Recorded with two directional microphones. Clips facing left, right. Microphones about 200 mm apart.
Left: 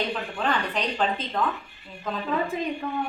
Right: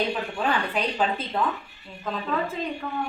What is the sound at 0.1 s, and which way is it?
Speech, 10° right (ahead or behind).